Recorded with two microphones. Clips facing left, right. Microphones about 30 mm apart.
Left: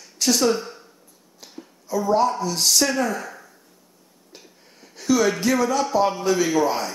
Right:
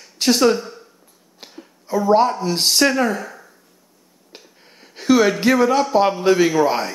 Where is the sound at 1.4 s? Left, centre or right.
Right.